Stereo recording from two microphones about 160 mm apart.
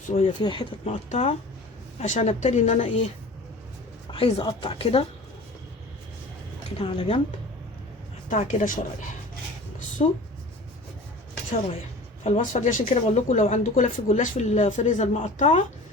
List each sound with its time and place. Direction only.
0.4 s a woman's voice: 30° left (ahead or behind)
1.1 s speech: 45° left (ahead or behind)
4.4 s a woman's voice: 30° left (ahead or behind)
6.7 s a woman's voice: 40° left (ahead or behind)
8.3 s speech: 55° left (ahead or behind)
12.2 s speech: 50° left (ahead or behind)